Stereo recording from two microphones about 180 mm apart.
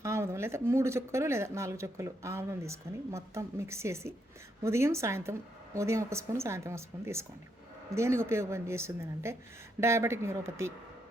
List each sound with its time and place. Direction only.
0.0 s speech: 15° right (ahead or behind)